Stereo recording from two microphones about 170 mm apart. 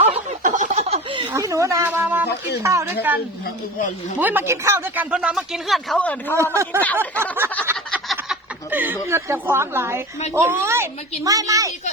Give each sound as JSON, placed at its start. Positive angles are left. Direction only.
{"t": 0.4, "sound": "a sound", "side_deg": -45}
{"t": 1.3, "sound": "a woman's voice", "side_deg": -20}
{"t": 4.2, "sound": "a woman's voice", "side_deg": -10}
{"t": 5.1, "sound": "speech", "side_deg": -5}
{"t": 6.3, "sound": "a woman's voice", "side_deg": -15}
{"t": 7.9, "sound": "a sound", "side_deg": -5}
{"t": 9.0, "sound": "a woman's voice", "side_deg": -15}